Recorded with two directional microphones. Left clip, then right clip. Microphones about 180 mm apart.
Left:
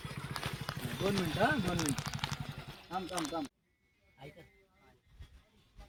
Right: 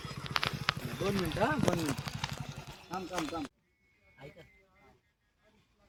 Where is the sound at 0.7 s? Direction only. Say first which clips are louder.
Right 9 dB; 15° left (ahead or behind).